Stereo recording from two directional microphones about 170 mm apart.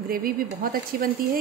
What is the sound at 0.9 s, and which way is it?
Speech, 60° right (ahead or behind).